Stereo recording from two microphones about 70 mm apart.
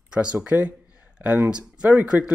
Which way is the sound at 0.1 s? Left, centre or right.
Centre.